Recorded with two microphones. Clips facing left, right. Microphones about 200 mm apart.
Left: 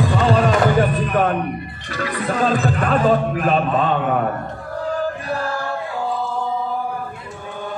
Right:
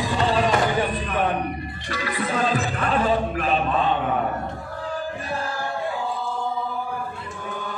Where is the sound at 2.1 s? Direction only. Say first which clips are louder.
Left 4 dB; 45° left (ahead or behind).